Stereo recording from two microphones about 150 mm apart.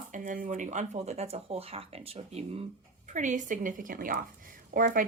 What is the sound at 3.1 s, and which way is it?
A woman's voice, 55° right (ahead or behind).